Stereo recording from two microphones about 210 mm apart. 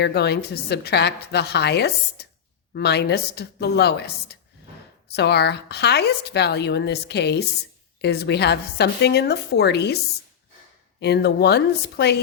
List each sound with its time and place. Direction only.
0.0 s a woman's voice: 50° left (ahead or behind)
11.0 s a woman's voice: 50° left (ahead or behind)